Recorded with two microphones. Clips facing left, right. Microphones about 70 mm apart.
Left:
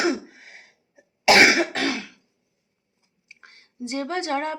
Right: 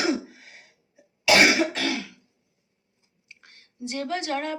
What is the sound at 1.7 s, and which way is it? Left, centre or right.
Throat clearing, left.